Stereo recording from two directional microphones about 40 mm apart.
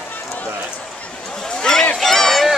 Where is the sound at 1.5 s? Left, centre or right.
Centre.